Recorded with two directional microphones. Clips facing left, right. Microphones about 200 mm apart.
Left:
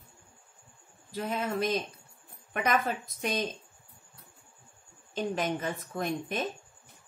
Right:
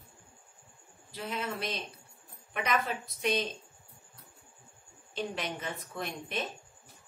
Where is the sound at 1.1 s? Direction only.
45° left (ahead or behind).